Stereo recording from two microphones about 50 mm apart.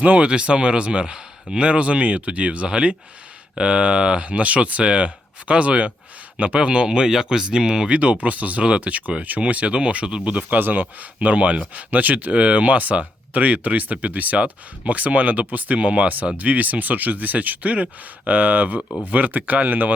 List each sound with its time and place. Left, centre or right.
0.0 s speech: right
18.8 s speech: left
19.0 s speech: right